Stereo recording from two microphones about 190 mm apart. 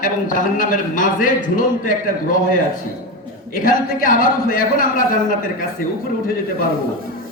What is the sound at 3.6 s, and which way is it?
A man's voice, 45° left (ahead or behind).